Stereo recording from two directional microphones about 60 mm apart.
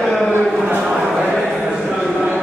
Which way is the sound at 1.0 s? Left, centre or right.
Right.